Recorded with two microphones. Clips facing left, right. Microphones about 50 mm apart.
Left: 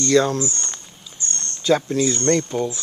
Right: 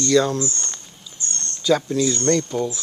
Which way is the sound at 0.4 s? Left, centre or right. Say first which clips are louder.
Even; centre.